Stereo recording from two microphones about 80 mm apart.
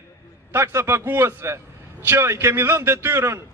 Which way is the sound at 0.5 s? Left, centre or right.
Right.